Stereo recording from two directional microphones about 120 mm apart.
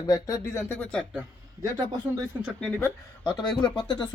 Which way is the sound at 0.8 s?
10° left (ahead or behind).